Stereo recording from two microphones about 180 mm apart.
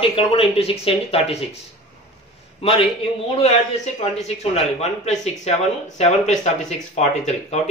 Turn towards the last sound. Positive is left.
turn(degrees=40)  # may be behind; listen again after turning